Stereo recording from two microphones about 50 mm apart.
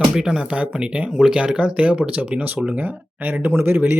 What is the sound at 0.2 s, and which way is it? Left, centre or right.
Speech, centre.